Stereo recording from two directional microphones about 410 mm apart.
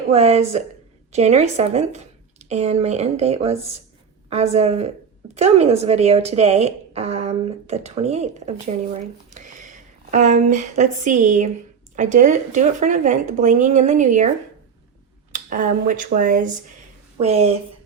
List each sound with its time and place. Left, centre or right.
0.1 s speech: centre
15.3 s speech: centre